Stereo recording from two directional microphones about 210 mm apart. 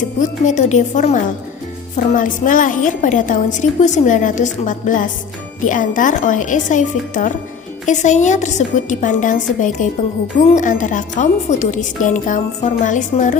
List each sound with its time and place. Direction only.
0.2 s a woman's voice: 35° left (ahead or behind)